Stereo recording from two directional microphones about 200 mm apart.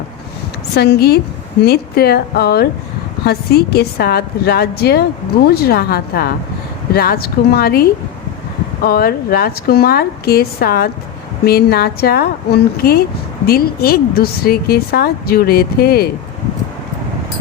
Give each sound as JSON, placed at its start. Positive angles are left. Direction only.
{"t": 0.8, "sound": "a woman's voice", "side_deg": 50}